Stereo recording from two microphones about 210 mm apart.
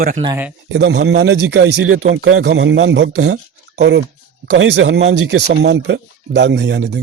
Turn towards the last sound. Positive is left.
turn(degrees=-55)  # may be behind; listen again after turning